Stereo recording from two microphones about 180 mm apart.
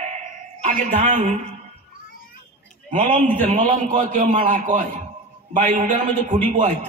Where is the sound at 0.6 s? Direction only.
40° right (ahead or behind).